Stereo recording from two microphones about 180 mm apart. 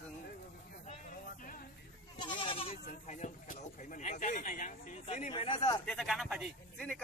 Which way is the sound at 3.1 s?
45° left (ahead or behind).